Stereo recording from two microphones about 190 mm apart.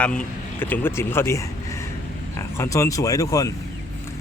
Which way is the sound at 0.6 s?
10° left (ahead or behind).